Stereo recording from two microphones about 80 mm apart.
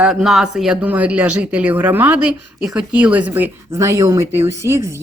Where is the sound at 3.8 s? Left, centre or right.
Right.